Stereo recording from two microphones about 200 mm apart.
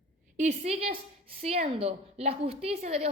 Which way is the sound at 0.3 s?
35° right (ahead or behind).